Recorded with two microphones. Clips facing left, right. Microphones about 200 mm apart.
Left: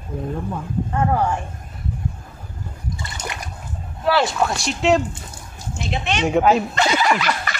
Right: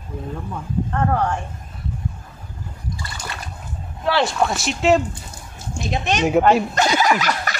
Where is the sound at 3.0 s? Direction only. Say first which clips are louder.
Left 2 dB; 20° left (ahead or behind).